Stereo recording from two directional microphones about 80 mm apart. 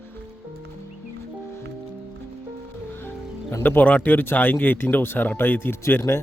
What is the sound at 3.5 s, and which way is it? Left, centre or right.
Speech, left.